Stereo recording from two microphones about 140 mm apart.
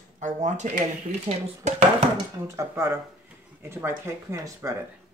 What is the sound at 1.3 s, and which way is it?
Speech, 45° right (ahead or behind).